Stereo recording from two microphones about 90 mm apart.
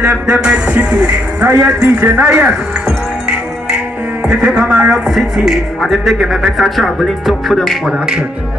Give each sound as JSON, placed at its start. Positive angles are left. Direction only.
{"t": 0.3, "sound": "a man's voice", "side_deg": -10}
{"t": 4.3, "sound": "a man's voice", "side_deg": -10}